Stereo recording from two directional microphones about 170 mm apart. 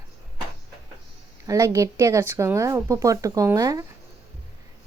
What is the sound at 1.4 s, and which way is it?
Speech, 20° right (ahead or behind).